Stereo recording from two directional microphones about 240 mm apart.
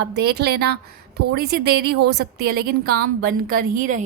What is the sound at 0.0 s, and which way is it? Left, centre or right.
A woman's voice, right.